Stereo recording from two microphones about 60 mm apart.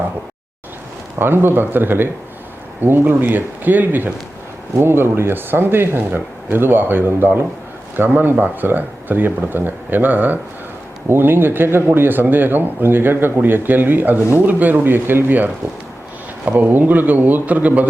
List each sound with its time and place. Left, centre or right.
1.2 s speech: right
4.8 s speech: right
16.5 s speech: right